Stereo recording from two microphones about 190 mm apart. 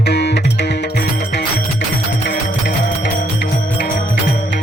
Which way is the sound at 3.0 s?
40° left (ahead or behind).